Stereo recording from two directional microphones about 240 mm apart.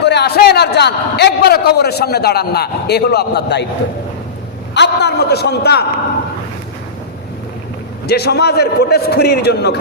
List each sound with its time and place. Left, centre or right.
0.0 s a man's voice: left
4.7 s a man's voice: left
8.0 s a man's voice: left